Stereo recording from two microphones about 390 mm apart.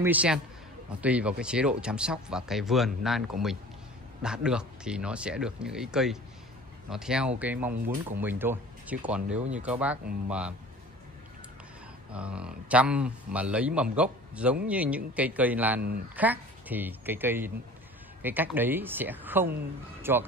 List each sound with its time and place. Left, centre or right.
0.0 s speech: centre
12.1 s speech: centre